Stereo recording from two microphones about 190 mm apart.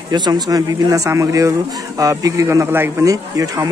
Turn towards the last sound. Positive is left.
turn(degrees=-20)  # may be behind; listen again after turning